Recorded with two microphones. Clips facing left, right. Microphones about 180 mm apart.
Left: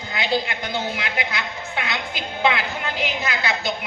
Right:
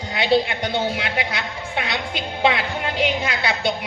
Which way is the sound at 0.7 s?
30° right (ahead or behind).